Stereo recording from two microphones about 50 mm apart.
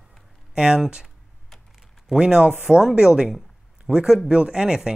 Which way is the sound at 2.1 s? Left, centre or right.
Centre.